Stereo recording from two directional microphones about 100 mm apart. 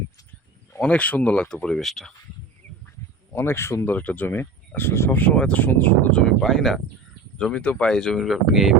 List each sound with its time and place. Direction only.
0.8 s speech: 10° left (ahead or behind)
3.3 s speech: 25° left (ahead or behind); by 8.7 s centre (ahead or behind)